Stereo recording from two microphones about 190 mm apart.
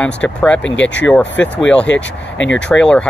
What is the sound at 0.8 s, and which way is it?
Speech, 70° left (ahead or behind).